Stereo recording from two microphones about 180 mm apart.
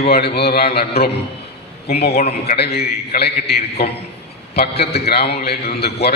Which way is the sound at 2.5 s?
60° left (ahead or behind).